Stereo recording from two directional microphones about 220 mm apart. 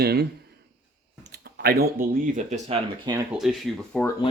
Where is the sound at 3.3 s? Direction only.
Centre (ahead or behind).